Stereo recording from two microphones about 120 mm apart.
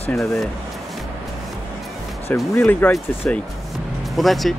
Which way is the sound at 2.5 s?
15° left (ahead or behind).